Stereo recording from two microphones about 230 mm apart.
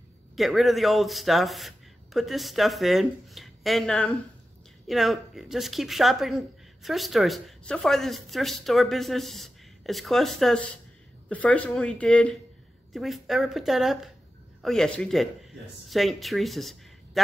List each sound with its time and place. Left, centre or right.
0.4 s speech: centre